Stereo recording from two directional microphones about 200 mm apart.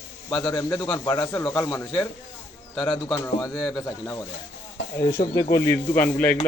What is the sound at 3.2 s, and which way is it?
Speech, 20° left (ahead or behind).